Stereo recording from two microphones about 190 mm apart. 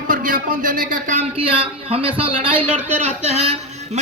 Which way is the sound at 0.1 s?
45° right (ahead or behind).